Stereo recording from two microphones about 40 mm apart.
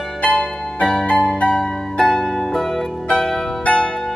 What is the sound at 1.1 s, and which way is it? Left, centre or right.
Music, left.